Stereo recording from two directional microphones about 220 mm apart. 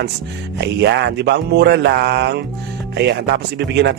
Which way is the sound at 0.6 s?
50° right (ahead or behind).